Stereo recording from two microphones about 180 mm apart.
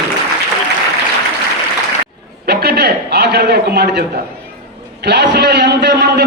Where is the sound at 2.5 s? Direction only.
60° right (ahead or behind).